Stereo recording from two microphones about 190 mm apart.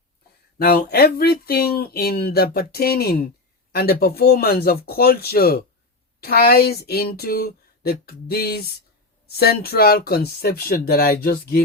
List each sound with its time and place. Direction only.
0.6 s speech: 55° left (ahead or behind)